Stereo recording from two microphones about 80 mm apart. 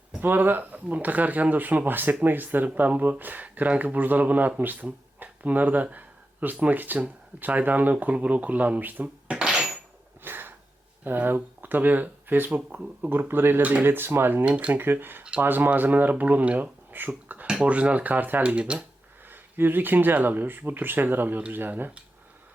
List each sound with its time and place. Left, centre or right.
0.2 s speech: right
9.3 s a sound: centre
10.2 s a sound: right
11.0 s speech: right
14.4 s speech: centre
14.8 s speech: right
15.2 s speech: centre
15.4 s speech: right
17.1 s a sound: right
17.4 s speech: centre
19.3 s speech: right